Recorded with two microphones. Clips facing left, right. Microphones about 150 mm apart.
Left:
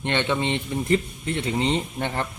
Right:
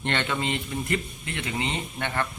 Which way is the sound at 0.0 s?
20° left (ahead or behind).